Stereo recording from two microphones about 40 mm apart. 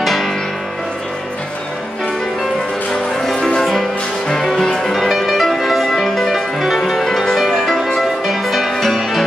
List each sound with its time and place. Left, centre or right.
0.0 s music: centre
3.3 s music: centre
4.9 s music: centre